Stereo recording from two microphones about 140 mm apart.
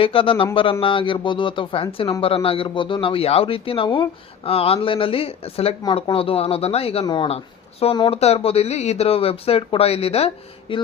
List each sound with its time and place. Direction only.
0.0 s a man's voice: 40° left (ahead or behind)
7.0 s a man's voice: 30° left (ahead or behind)
7.3 s speech: 45° left (ahead or behind)